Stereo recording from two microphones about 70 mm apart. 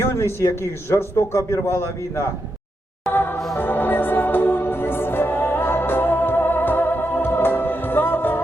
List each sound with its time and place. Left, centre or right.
0.3 s a man's voice: left
3.1 s music: left